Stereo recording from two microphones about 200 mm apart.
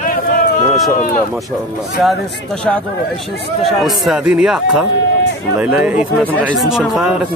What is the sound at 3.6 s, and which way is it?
Speech, centre (ahead or behind).